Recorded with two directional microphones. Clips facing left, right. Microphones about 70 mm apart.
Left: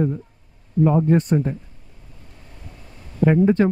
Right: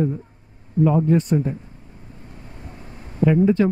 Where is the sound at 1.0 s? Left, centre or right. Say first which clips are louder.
Left 1 dB; left.